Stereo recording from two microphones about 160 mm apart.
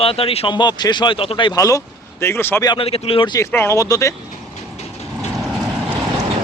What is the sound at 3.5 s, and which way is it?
Speech, 15° left (ahead or behind).